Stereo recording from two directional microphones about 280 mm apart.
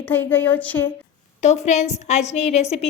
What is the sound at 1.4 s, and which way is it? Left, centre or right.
A woman's voice, left.